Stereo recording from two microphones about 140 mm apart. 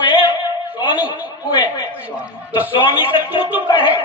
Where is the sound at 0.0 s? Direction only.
35° left (ahead or behind).